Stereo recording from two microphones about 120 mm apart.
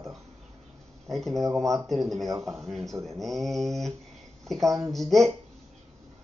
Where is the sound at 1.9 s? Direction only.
Centre (ahead or behind).